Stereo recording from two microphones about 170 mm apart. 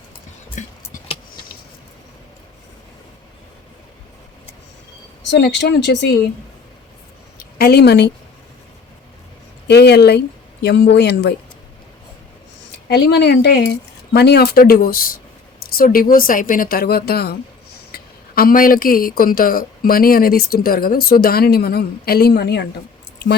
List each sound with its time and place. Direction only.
0.6 s music: 45° left (ahead or behind)
5.3 s speech: 85° left
7.3 s a woman's voice: 70° left (ahead or behind)
9.6 s speech: 75° left (ahead or behind)
12.9 s speech: 80° left